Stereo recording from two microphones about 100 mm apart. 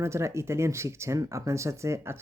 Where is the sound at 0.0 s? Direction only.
30° right (ahead or behind).